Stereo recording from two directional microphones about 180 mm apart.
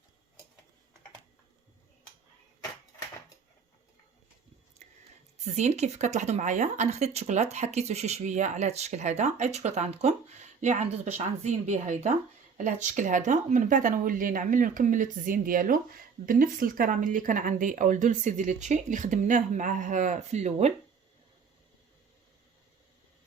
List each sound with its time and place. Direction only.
5.5 s speech: 40° right (ahead or behind)